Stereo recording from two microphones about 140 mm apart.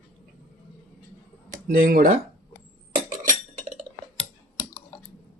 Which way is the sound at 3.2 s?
60° right (ahead or behind).